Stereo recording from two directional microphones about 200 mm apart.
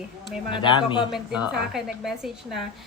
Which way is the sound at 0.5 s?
25° left (ahead or behind).